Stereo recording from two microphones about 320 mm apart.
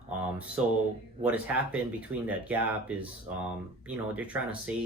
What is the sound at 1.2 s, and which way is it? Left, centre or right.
Speech, centre.